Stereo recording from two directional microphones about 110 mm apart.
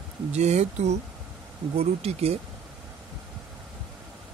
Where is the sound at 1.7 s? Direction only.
65° right (ahead or behind).